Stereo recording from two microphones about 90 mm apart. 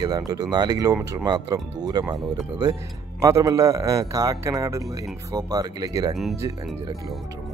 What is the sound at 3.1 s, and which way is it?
A man's voice, 40° right (ahead or behind).